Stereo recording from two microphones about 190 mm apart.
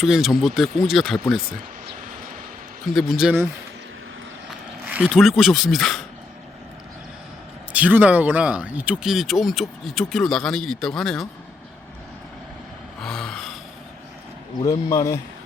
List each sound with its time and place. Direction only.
0.0 s speech: centre (ahead or behind)
2.9 s speech: centre (ahead or behind)
4.9 s speech: 5° right (ahead or behind)
7.7 s speech: 10° right (ahead or behind)
13.0 s a sound: centre (ahead or behind)
14.7 s speech: 15° left (ahead or behind)